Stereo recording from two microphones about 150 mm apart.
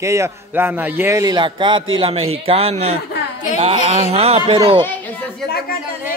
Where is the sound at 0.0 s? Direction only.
20° right (ahead or behind); by 3.0 s 45° right (ahead or behind).